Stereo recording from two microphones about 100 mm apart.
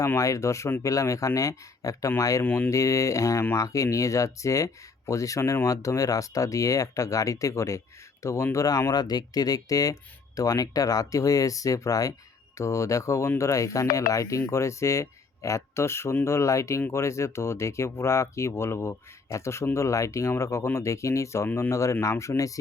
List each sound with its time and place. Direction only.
0.0 s speech: 30° left (ahead or behind)
2.4 s speech: 20° left (ahead or behind)
2.6 s speech: 30° left (ahead or behind)